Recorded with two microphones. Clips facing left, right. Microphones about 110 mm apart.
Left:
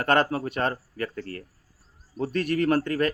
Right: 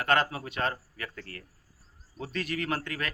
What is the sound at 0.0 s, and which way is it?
Speech, 50° left (ahead or behind).